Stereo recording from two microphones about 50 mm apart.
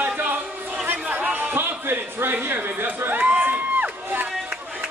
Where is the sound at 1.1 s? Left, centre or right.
Right.